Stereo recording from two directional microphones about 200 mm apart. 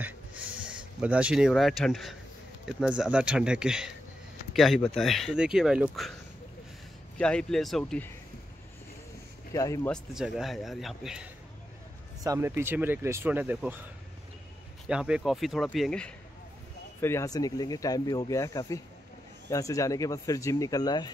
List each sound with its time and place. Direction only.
0.7 s speech: 5° right (ahead or behind)
7.2 s speech: 5° left (ahead or behind)
9.5 s speech: 15° left (ahead or behind)
9.8 s speech: centre (ahead or behind)
12.2 s speech: 15° right (ahead or behind)
14.9 s speech: 5° right (ahead or behind)
17.0 s speech: 15° left (ahead or behind)